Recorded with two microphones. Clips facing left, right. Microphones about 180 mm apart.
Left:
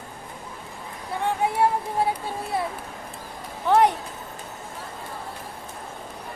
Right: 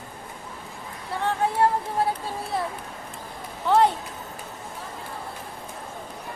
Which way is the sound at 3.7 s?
15° left (ahead or behind).